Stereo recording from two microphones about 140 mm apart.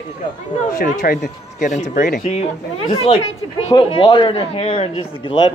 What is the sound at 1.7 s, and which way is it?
Speech, 70° left (ahead or behind).